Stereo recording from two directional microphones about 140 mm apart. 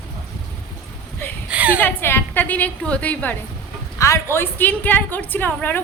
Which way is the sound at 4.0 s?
20° left (ahead or behind).